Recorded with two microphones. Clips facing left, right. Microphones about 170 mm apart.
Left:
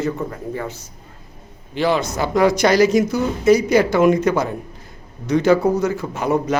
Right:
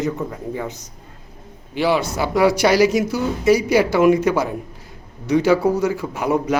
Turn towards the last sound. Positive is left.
turn(degrees=-10)  # may be behind; listen again after turning